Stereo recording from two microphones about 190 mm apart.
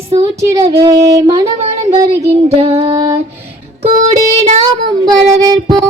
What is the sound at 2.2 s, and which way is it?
Child singing, 30° right (ahead or behind).